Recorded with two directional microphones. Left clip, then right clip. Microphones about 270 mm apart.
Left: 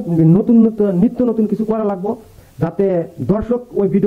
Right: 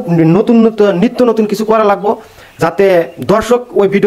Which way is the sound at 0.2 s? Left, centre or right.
Centre.